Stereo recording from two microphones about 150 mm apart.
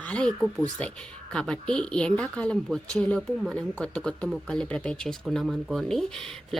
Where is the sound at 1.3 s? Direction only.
5° left (ahead or behind).